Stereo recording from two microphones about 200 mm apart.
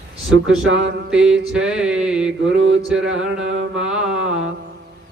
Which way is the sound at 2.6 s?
70° right (ahead or behind).